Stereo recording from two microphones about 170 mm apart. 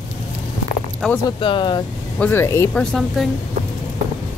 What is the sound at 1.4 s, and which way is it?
Speech, 30° left (ahead or behind).